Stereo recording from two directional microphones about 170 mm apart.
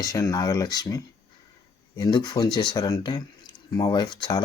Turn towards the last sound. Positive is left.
turn(degrees=25)  # may be behind; listen again after turning